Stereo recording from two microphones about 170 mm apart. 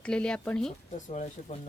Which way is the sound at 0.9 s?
45° left (ahead or behind).